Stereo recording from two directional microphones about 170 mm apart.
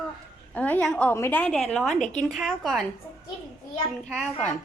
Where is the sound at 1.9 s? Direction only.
45° left (ahead or behind).